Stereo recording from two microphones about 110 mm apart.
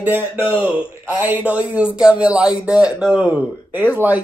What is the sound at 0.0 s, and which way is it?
Speech, 20° right (ahead or behind).